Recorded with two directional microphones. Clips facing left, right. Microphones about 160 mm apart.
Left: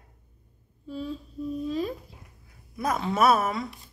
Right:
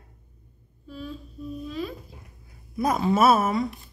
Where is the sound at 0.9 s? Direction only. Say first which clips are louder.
Left 3 dB; 25° left (ahead or behind).